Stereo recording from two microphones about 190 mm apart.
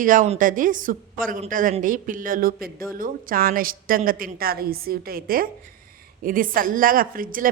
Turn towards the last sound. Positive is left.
turn(degrees=-45)  # may be behind; listen again after turning